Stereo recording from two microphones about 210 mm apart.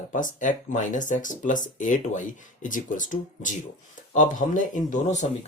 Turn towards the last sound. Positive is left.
turn(degrees=35)  # may be behind; listen again after turning